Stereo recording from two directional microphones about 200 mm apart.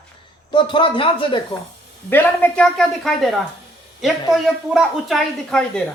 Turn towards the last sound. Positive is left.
turn(degrees=0)  # may be behind; listen again after turning